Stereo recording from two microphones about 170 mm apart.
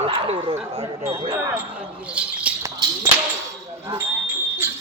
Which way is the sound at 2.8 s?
25° right (ahead or behind).